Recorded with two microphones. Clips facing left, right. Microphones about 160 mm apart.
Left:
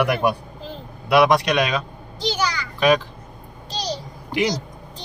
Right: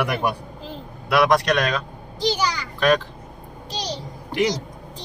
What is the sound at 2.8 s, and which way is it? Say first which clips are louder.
Speech: left 1 dB; 10° left (ahead or behind).